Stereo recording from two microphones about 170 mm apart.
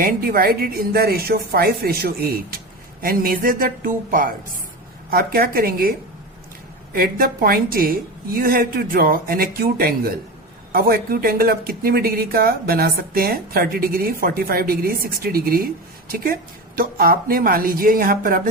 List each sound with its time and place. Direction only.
0.0 s speech: 60° right (ahead or behind)